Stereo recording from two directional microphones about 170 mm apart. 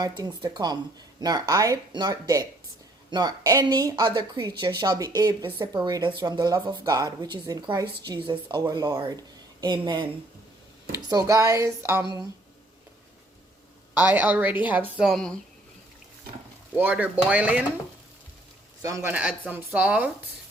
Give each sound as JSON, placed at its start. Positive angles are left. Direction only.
{"t": 0.0, "sound": "a woman's voice", "side_deg": -25}
{"t": 13.9, "sound": "a woman's voice", "side_deg": -10}
{"t": 16.7, "sound": "speech", "side_deg": -10}
{"t": 18.8, "sound": "a woman's voice", "side_deg": -20}
{"t": 19.1, "sound": "speech", "side_deg": -5}